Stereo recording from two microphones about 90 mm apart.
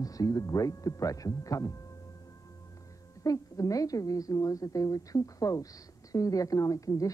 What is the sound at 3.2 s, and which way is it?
A woman's voice, 40° left (ahead or behind).